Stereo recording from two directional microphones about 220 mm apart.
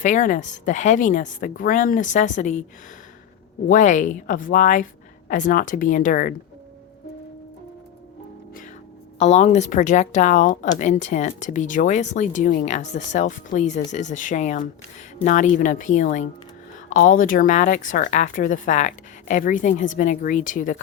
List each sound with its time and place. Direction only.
0.0 s speech: 35° left (ahead or behind)
3.7 s speech: 35° left (ahead or behind)
9.1 s speech: 30° left (ahead or behind)